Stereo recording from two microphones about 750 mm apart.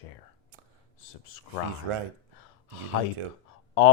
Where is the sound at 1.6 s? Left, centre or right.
Left.